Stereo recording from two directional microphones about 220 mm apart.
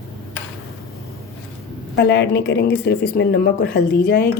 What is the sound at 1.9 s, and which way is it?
Speech, 50° left (ahead or behind).